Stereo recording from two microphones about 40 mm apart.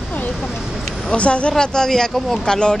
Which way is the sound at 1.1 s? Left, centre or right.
Left.